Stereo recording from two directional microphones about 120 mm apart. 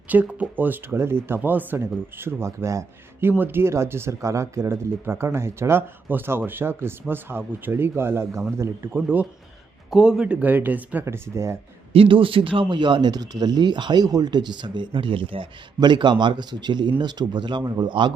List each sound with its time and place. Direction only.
0.1 s speech: 15° right (ahead or behind)
11.9 s speech: 45° right (ahead or behind)